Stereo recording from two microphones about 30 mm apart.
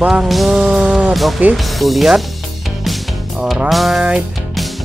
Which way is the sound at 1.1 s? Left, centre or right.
Centre.